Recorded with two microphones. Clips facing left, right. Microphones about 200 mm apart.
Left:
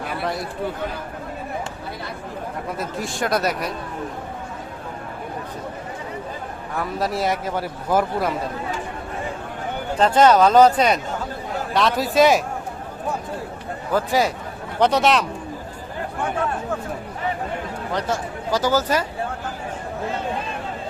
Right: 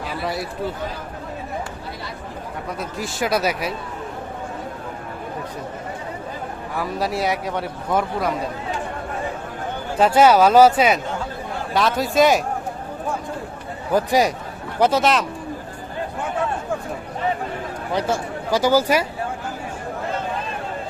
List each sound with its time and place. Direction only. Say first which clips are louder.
0.2 s speech: right 1 dB; 5° right (ahead or behind)
2.7 s speech: right 1 dB; centre (ahead or behind)
6.7 s speech: even; centre (ahead or behind)
10.0 s speech: right 1 dB; 10° right (ahead or behind)
13.9 s speech: right 2 dB; 15° right (ahead or behind)
14.8 s speech: even; 5° right (ahead or behind)
17.9 s speech: right 3 dB; 10° right (ahead or behind)